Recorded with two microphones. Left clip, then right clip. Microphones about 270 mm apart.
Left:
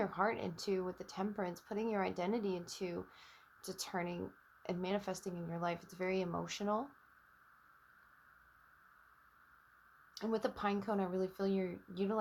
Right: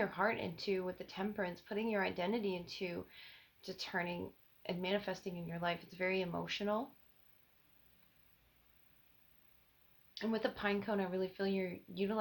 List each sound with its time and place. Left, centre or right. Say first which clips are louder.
0.0 s speech: even; left
10.2 s speech: even; left